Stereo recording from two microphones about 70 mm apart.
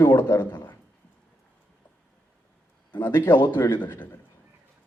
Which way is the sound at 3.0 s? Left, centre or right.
Left.